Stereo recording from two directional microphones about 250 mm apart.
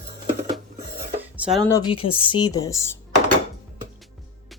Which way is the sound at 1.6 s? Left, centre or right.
Centre.